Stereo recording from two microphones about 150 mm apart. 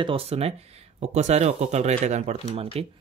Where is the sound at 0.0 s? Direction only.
40° right (ahead or behind).